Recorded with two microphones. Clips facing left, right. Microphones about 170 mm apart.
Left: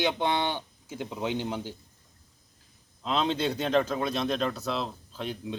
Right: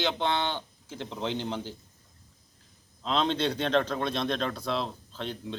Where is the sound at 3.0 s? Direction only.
5° left (ahead or behind).